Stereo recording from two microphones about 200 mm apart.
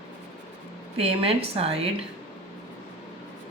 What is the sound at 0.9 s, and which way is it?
Speech, 30° right (ahead or behind).